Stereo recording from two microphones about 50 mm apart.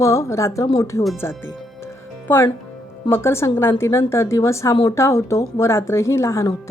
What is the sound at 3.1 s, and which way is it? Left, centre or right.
A woman's voice, left.